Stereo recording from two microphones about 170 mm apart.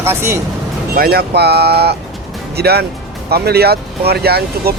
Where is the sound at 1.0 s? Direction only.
65° right (ahead or behind).